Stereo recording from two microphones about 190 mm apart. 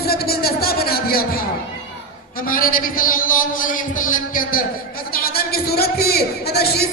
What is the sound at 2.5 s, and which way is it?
A man's voice, 50° left (ahead or behind).